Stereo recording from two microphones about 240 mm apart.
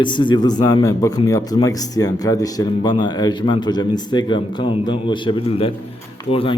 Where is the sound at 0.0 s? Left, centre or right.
Centre.